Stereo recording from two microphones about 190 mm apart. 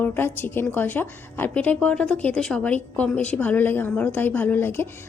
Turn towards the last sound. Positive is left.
turn(degrees=10)  # may be behind; listen again after turning